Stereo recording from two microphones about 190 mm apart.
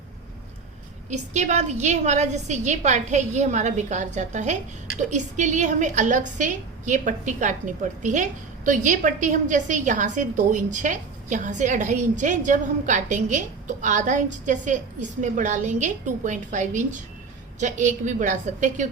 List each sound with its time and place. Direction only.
1.1 s a woman's voice: 40° right (ahead or behind)